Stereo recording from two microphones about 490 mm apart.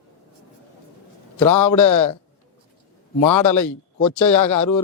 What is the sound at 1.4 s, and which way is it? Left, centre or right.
Speech, centre.